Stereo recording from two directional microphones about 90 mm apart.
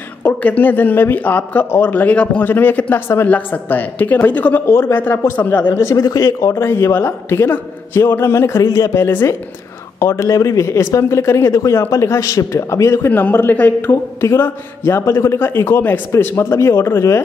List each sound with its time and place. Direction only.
0.2 s a man's voice: 20° left (ahead or behind)
4.6 s a man's voice: 30° left (ahead or behind)
5.8 s speech: 30° left (ahead or behind)
6.5 s a man's voice: 30° left (ahead or behind)
13.1 s a man's voice: 20° left (ahead or behind)